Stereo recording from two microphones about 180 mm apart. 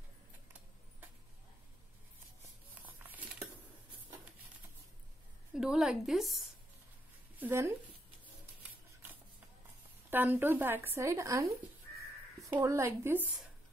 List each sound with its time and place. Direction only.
2.7 s a sound: 10° right (ahead or behind)
5.5 s a woman's voice: 5° right (ahead or behind)
7.3 s speech: 10° right (ahead or behind)
10.0 s speech: 10° right (ahead or behind)